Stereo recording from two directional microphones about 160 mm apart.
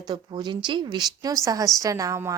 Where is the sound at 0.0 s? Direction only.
25° right (ahead or behind).